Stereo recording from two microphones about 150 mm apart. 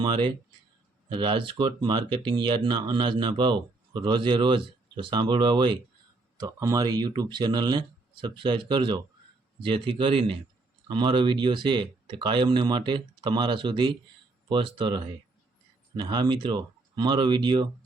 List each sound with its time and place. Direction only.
0.0 s speech: 30° right (ahead or behind)